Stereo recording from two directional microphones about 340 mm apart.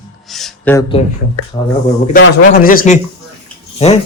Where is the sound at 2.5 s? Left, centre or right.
Left.